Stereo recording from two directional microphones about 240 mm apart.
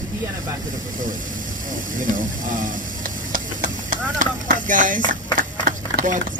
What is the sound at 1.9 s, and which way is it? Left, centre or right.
Speech, right.